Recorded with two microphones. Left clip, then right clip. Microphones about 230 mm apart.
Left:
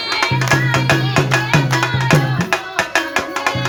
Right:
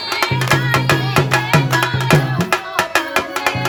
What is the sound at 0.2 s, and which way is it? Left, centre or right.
Music, right.